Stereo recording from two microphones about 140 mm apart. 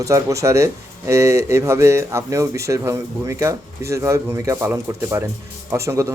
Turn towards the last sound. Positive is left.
turn(degrees=-20)  # may be behind; listen again after turning